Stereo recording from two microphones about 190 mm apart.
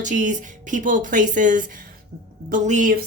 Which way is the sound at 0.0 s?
40° right (ahead or behind).